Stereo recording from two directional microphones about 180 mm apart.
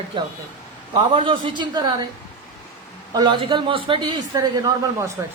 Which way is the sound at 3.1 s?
25° right (ahead or behind).